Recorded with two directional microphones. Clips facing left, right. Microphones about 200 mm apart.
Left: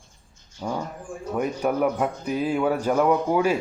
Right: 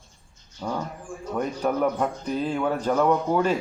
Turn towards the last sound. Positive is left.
turn(degrees=10)  # may be behind; listen again after turning